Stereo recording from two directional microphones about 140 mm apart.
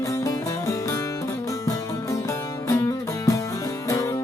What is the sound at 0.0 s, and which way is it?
Music, 25° left (ahead or behind).